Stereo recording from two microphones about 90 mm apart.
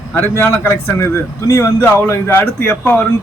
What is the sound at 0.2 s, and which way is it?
Speech, 25° left (ahead or behind).